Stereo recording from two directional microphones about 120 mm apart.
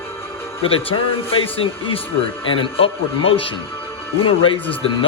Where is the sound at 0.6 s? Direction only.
50° left (ahead or behind).